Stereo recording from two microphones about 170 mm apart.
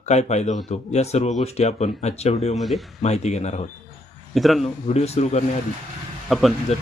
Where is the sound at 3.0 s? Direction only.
40° left (ahead or behind).